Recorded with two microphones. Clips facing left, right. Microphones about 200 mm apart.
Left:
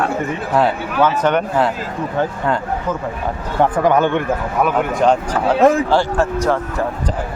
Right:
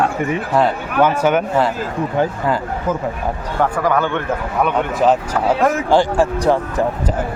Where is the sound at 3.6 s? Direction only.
20° left (ahead or behind).